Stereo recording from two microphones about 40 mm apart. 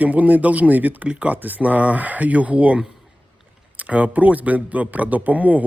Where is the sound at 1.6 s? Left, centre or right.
Right.